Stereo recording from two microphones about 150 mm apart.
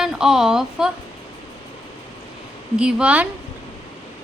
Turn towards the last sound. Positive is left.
turn(degrees=-5)  # may be behind; listen again after turning